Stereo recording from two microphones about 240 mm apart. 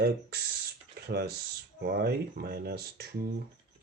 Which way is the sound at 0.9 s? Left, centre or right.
Right.